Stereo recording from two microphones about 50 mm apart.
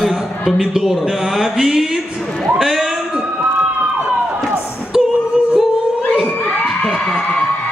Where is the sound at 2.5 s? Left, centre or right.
Centre.